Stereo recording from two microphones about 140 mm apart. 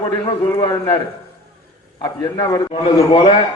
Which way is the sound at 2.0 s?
30° left (ahead or behind).